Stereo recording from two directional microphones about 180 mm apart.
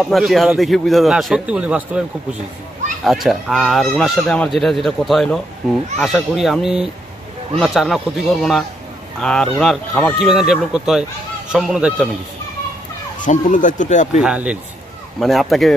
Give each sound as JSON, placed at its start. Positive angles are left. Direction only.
{"t": 0.0, "sound": "speech", "side_deg": 0}
{"t": 13.2, "sound": "speech", "side_deg": 45}
{"t": 14.2, "sound": "speech", "side_deg": -5}